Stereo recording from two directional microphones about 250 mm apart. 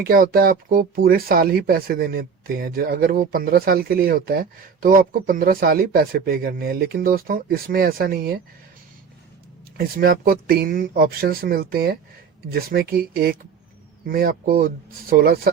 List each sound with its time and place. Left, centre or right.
0.0 s speech: right
9.7 s speech: right